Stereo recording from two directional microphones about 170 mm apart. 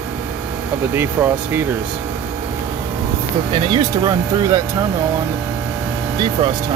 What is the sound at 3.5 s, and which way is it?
Speech, 25° right (ahead or behind).